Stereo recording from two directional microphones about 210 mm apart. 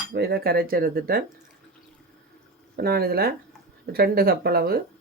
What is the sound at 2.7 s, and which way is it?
Cutlery, 45° right (ahead or behind).